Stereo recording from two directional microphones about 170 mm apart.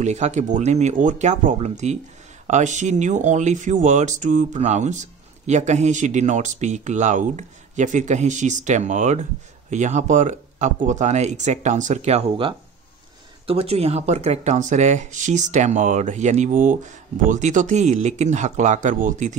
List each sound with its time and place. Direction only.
0.0 s speech: 40° right (ahead or behind)